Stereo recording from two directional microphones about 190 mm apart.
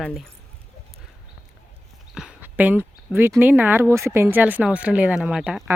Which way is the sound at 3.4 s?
10° right (ahead or behind).